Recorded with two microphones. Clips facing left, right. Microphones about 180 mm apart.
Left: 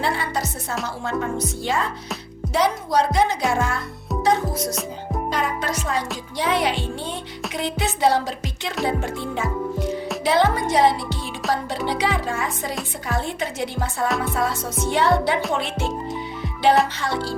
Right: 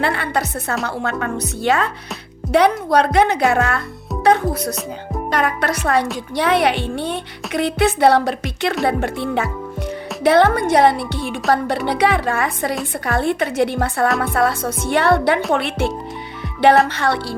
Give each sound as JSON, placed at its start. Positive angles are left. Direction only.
{"t": 0.0, "sound": "speech", "side_deg": -65}
{"t": 16.9, "sound": "speech", "side_deg": -65}